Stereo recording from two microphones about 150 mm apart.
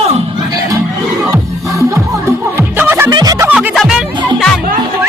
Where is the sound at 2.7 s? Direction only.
15° right (ahead or behind).